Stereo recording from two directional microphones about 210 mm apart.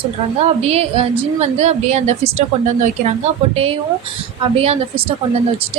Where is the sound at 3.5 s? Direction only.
25° right (ahead or behind).